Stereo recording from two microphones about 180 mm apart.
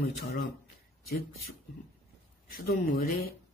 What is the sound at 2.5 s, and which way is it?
Speech, 55° left (ahead or behind).